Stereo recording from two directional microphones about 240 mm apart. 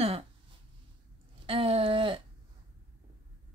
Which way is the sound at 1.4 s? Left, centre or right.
Right.